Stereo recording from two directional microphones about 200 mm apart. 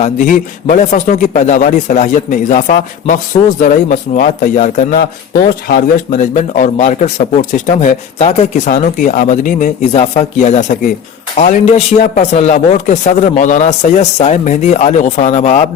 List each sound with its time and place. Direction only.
0.0 s speech: 40° left (ahead or behind)